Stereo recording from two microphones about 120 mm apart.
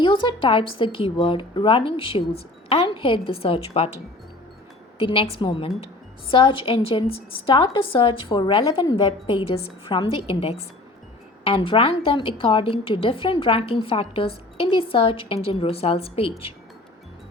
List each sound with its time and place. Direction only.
0.0 s a woman's voice: 40° left (ahead or behind)
4.9 s a woman's voice: 50° left (ahead or behind)
9.0 s a woman's voice: 50° left (ahead or behind)